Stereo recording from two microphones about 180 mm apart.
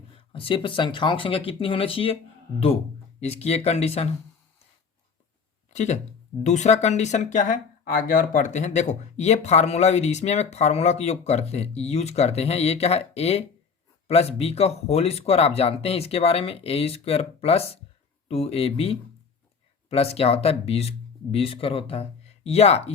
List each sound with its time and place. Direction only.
0.1 s speech: 30° left (ahead or behind)
3.2 s speech: 35° left (ahead or behind)
5.7 s speech: 40° left (ahead or behind)